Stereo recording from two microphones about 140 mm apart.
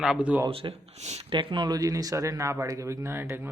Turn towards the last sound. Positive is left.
turn(degrees=-15)  # may be behind; listen again after turning